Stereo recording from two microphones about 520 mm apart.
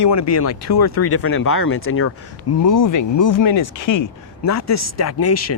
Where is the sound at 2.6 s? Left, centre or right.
Left.